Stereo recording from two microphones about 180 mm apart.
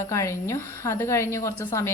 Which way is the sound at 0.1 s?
15° left (ahead or behind).